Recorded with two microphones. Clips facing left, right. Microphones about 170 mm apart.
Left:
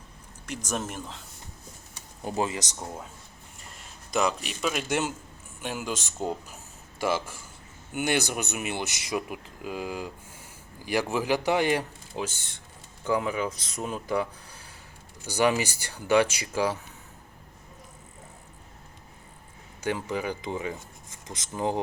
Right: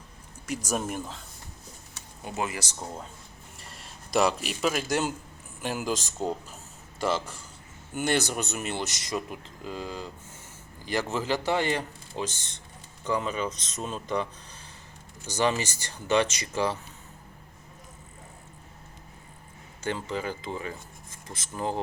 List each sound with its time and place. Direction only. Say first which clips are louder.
0.4 s speech: right 2 dB; 10° right (ahead or behind)
2.2 s speech: left 3 dB; 30° left (ahead or behind)
2.6 s a man's voice: left 1 dB; 10° left (ahead or behind)
7.9 s speech: even; 10° left (ahead or behind)
19.8 s speech: left 2 dB; 10° left (ahead or behind)